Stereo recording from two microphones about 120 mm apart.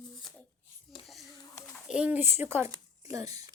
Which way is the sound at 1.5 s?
20° left (ahead or behind).